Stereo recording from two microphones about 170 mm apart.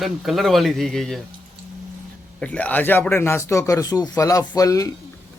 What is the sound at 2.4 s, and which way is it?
Speech, 5° left (ahead or behind).